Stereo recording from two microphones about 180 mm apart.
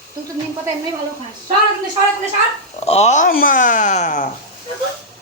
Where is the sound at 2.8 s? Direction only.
35° left (ahead or behind).